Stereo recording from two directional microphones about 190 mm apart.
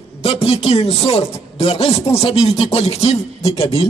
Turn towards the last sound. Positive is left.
turn(degrees=35)  # may be behind; listen again after turning